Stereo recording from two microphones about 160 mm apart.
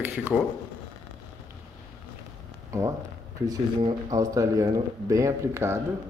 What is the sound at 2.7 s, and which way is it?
Speech, 20° right (ahead or behind).